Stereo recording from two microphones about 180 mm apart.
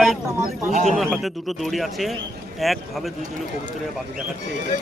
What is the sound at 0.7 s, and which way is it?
Speech, 40° right (ahead or behind).